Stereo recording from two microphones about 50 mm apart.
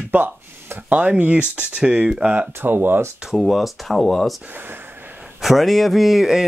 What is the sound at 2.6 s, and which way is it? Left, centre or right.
Speech, right.